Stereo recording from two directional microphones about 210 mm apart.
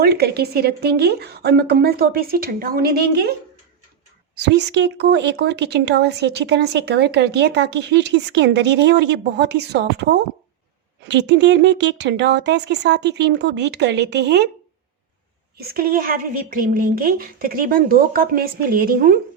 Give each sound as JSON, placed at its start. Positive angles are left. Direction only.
{"t": 0.0, "sound": "speech", "side_deg": -50}
{"t": 4.4, "sound": "speech", "side_deg": -55}
{"t": 15.5, "sound": "speech", "side_deg": -45}